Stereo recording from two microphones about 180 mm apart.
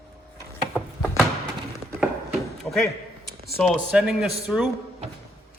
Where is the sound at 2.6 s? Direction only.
Centre (ahead or behind).